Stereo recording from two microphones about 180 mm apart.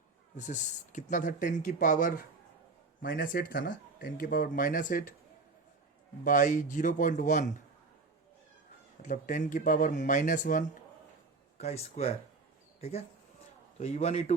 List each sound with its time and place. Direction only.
0.3 s speech: 45° left (ahead or behind)
6.2 s speech: 45° left (ahead or behind)
9.0 s speech: 45° left (ahead or behind)